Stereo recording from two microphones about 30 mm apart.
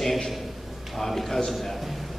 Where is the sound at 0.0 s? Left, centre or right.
Centre.